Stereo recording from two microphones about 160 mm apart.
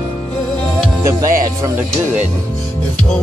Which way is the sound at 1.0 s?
20° right (ahead or behind).